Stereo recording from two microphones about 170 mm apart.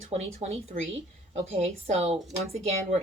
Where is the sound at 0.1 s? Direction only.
40° right (ahead or behind).